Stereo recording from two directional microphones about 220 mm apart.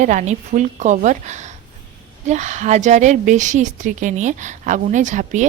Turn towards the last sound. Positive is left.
turn(degrees=-35)  # may be behind; listen again after turning